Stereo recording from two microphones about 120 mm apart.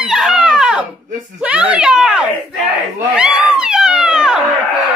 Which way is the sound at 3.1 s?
10° right (ahead or behind).